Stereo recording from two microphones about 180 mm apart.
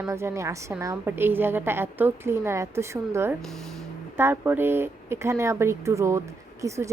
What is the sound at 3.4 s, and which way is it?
Speech, centre (ahead or behind).